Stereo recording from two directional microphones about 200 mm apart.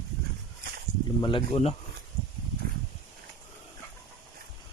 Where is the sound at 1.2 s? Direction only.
30° left (ahead or behind).